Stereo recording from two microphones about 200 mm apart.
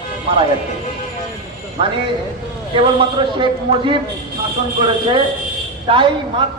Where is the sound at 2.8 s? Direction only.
25° right (ahead or behind).